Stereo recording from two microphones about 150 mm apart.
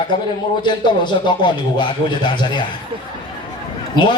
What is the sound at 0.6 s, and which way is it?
Speech, 30° left (ahead or behind).